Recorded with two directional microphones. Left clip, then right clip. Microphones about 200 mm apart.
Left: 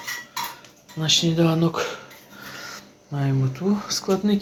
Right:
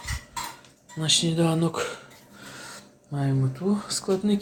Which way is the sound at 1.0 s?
5° right (ahead or behind).